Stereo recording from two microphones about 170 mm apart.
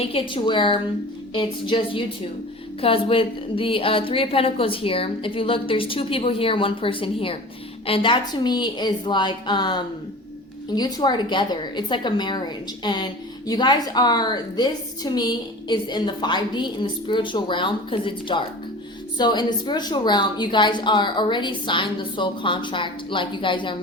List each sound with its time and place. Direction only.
0.0 s a woman's voice: 35° left (ahead or behind)